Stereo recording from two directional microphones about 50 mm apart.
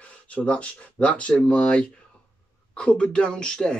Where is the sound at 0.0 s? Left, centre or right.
Left.